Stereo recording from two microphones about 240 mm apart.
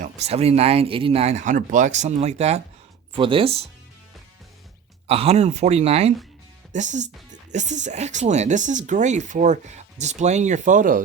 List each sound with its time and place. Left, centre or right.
0.0 s speech: right
5.0 s speech: right